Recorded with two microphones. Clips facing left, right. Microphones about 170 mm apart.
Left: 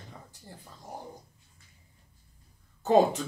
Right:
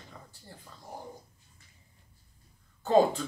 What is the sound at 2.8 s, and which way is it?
Speech, 20° left (ahead or behind).